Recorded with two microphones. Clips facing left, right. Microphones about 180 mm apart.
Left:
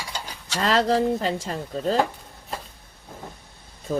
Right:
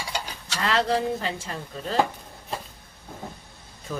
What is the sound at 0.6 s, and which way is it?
Speech, 40° left (ahead or behind).